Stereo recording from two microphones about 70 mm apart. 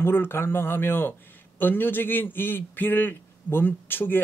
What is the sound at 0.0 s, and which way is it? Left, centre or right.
A man's voice, left.